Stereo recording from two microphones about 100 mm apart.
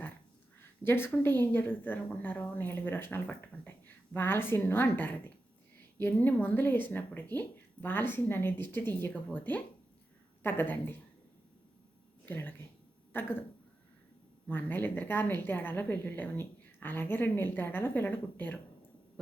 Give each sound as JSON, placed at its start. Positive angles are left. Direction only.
{"t": 0.9, "sound": "a woman's voice", "side_deg": 20}
{"t": 12.2, "sound": "a woman's voice", "side_deg": 20}
{"t": 14.4, "sound": "a woman's voice", "side_deg": 20}